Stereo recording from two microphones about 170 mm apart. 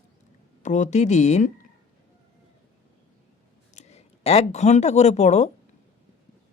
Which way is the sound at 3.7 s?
40° left (ahead or behind).